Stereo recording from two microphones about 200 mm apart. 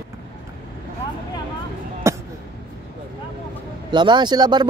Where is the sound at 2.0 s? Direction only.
15° right (ahead or behind).